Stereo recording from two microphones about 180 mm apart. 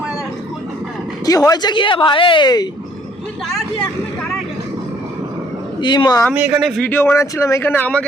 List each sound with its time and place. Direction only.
1.5 s a woman's voice: 25° left (ahead or behind)
5.8 s a woman's voice: 25° left (ahead or behind)
6.3 s speech: 10° right (ahead or behind); by 8.0 s 10° left (ahead or behind)